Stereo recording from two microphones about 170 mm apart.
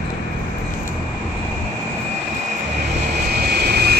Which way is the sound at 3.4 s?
70° right (ahead or behind).